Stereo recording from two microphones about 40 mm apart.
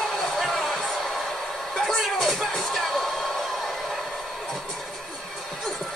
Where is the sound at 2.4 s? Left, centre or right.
Centre.